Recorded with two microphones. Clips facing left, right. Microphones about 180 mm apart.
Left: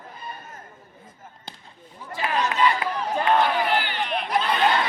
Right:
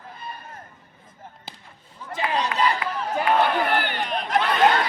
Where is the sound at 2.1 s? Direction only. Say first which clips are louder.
Right 1 dB; 20° right (ahead or behind).